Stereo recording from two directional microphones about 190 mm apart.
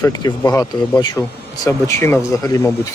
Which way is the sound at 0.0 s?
20° left (ahead or behind).